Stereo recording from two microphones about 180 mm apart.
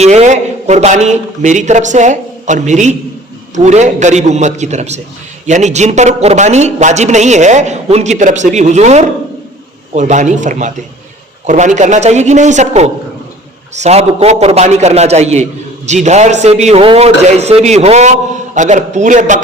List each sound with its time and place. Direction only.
0.0 s a man's voice: 40° right (ahead or behind)